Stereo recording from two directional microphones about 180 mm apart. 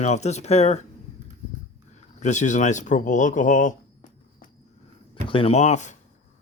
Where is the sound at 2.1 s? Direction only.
40° left (ahead or behind).